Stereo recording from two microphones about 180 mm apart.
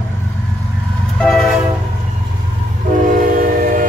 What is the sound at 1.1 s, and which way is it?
Train, centre (ahead or behind).